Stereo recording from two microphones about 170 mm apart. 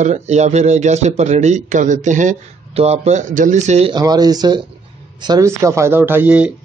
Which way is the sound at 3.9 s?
25° right (ahead or behind).